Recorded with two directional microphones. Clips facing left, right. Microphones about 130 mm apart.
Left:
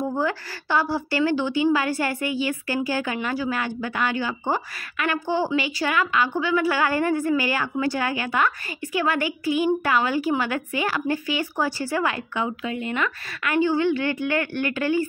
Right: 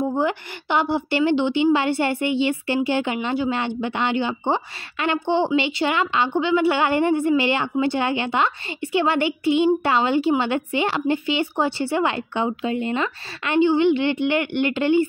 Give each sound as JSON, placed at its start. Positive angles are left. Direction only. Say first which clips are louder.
{"t": 0.0, "sound": "a woman's voice", "louder": "right 3 dB", "side_deg": -15}